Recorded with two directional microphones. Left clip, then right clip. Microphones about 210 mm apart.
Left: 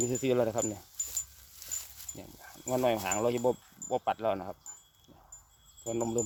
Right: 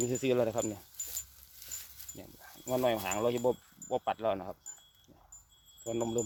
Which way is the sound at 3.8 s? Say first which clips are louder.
Left 2 dB; centre (ahead or behind).